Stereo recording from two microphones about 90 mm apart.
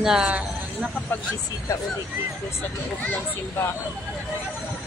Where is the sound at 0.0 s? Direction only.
5° right (ahead or behind).